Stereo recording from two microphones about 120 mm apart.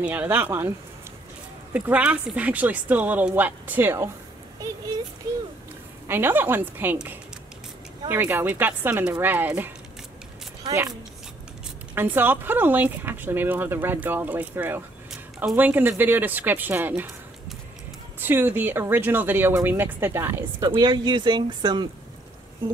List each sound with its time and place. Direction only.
0.0 s speech: 15° right (ahead or behind)
6.0 s speech: 20° right (ahead or behind)
11.9 s speech: 15° right (ahead or behind)
15.0 s a sound: 5° right (ahead or behind)
15.5 s speech: 15° right (ahead or behind)
18.2 s speech: 15° right (ahead or behind)
20.6 s speech: 35° right (ahead or behind)